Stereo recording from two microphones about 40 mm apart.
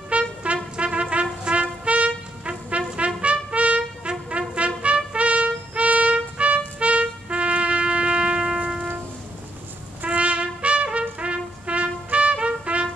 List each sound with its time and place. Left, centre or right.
0.1 s trumpet: right
5.1 s music: right
10.0 s trumpet: right